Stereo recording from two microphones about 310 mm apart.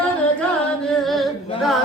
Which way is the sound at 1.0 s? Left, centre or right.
Centre.